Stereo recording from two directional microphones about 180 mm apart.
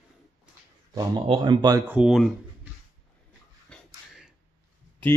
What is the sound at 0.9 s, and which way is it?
Speech, 25° right (ahead or behind).